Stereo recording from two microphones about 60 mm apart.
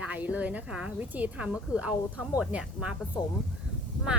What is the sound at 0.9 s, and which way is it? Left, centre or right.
Speech, right.